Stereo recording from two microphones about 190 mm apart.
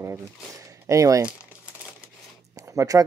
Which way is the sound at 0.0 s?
15° right (ahead or behind).